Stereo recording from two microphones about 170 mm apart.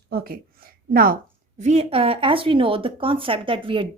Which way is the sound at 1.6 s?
40° right (ahead or behind).